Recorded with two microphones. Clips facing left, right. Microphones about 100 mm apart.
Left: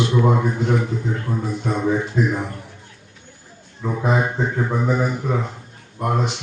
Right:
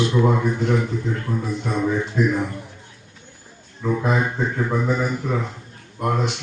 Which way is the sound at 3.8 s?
15° left (ahead or behind).